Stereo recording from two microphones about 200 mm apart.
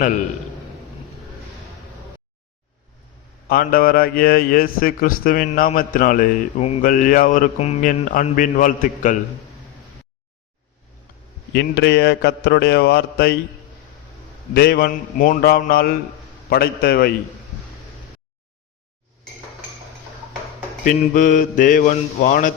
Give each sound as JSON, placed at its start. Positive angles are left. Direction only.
{"t": 3.5, "sound": "a man's voice", "side_deg": 45}
{"t": 11.5, "sound": "speech", "side_deg": 60}
{"t": 14.5, "sound": "a man's voice", "side_deg": 50}
{"t": 20.8, "sound": "speech", "side_deg": 40}